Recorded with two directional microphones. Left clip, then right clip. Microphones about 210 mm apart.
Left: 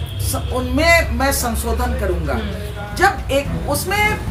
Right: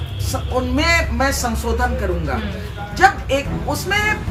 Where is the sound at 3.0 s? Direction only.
10° right (ahead or behind).